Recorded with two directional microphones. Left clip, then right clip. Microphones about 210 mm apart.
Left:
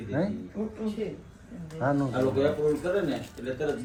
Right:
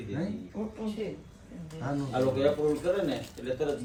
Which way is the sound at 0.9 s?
Centre (ahead or behind).